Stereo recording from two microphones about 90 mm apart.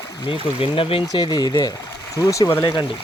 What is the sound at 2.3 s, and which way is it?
Speech, 35° left (ahead or behind).